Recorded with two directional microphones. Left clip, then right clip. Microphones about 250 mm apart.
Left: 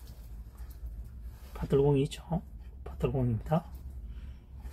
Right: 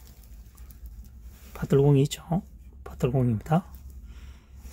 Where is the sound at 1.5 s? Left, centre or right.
Right.